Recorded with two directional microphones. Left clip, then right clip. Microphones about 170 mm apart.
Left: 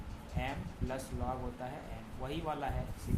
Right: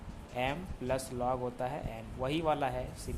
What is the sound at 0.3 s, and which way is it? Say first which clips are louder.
Speech: right 6 dB; 60° right (ahead or behind).